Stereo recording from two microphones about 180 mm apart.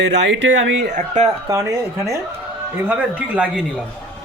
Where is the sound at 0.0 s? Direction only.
75° right (ahead or behind).